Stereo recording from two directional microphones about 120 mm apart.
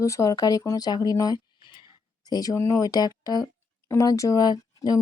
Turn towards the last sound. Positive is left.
turn(degrees=35)  # may be behind; listen again after turning